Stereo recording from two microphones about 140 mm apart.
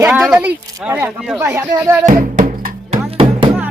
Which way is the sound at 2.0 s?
75° right (ahead or behind).